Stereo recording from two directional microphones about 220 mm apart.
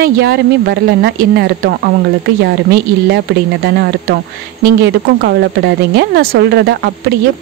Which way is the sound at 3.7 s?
45° right (ahead or behind).